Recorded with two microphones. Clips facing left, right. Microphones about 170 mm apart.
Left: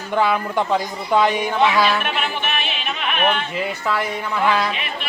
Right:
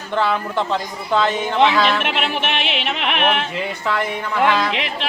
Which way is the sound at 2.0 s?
90° right.